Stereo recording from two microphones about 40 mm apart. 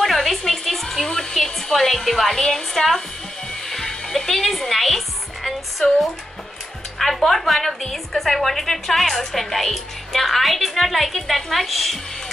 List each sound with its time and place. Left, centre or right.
0.0 s hair dryer: centre
2.4 s a woman's voice: centre
3.6 s music: centre
7.0 s a woman's voice: centre